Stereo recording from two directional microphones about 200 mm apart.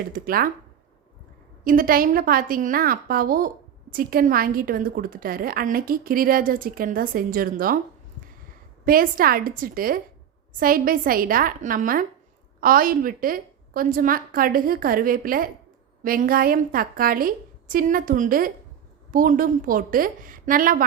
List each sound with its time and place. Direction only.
0.0 s a woman's voice: 45° right (ahead or behind)
1.6 s a woman's voice: 45° right (ahead or behind)
8.8 s a woman's voice: 45° right (ahead or behind)